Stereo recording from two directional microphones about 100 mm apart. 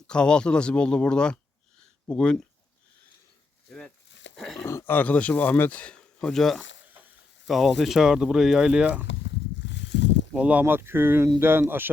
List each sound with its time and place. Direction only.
0.1 s speech: 10° left (ahead or behind)
3.7 s speech: 5° left (ahead or behind)
4.6 s speech: 25° left (ahead or behind); by 9.0 s 10° right (ahead or behind)
10.3 s speech: 10° right (ahead or behind)